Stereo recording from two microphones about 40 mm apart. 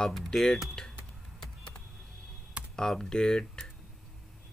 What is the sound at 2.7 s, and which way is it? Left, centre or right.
Speech, centre.